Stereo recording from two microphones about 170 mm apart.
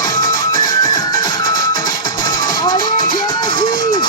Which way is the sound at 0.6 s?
20° left (ahead or behind).